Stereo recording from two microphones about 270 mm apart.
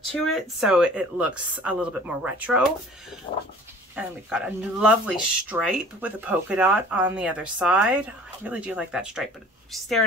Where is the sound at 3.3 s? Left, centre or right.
Left.